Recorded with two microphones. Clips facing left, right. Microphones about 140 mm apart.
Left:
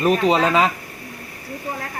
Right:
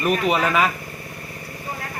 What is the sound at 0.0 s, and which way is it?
Speech, 30° left (ahead or behind).